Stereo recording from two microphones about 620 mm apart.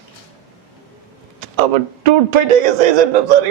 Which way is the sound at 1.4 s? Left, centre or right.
Right.